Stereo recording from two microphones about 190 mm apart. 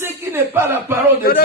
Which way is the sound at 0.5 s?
15° right (ahead or behind).